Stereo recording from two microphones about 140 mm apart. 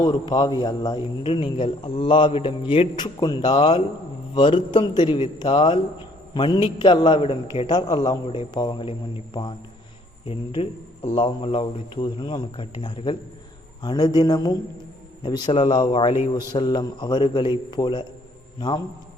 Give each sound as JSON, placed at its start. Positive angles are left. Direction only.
{"t": 0.0, "sound": "a man's voice", "side_deg": 30}